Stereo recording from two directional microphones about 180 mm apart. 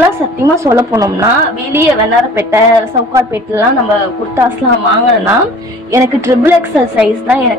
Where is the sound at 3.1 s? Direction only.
15° right (ahead or behind).